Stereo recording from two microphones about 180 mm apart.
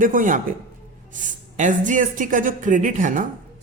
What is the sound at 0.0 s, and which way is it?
Speech, 45° right (ahead or behind).